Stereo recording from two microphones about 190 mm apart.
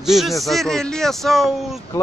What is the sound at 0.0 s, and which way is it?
Speech, centre (ahead or behind).